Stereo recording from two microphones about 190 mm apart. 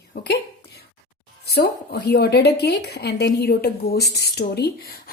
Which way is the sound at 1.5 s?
55° left (ahead or behind).